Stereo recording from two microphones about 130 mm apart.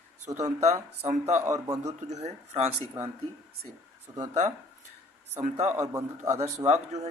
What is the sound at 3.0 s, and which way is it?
A man's voice, 20° right (ahead or behind).